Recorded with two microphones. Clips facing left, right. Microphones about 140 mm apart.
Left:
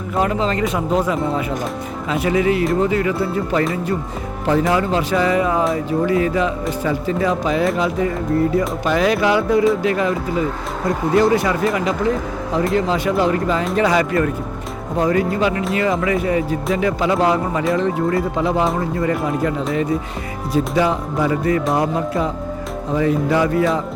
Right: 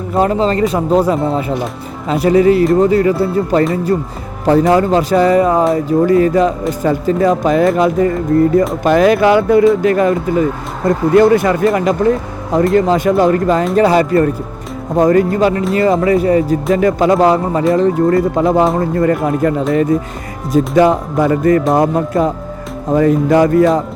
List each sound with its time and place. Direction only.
0.2 s speech: 35° right (ahead or behind)
13.7 s speech: 35° right (ahead or behind)
14.9 s speech: 45° right (ahead or behind)